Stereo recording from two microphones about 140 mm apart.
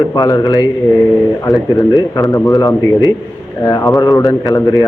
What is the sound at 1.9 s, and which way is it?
A man's voice, 25° left (ahead or behind).